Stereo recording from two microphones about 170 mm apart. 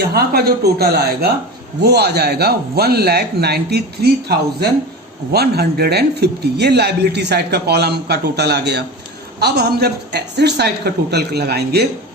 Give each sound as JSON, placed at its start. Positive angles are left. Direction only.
{"t": 0.1, "sound": "a man's voice", "side_deg": -65}